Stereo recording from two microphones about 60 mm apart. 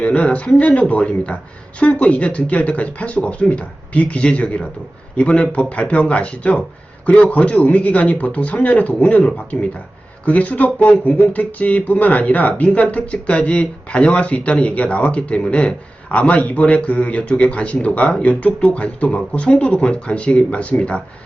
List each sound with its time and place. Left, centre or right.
0.0 s speech: left